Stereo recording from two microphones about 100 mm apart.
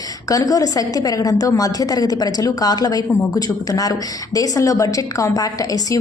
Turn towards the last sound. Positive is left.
turn(degrees=35)  # may be behind; listen again after turning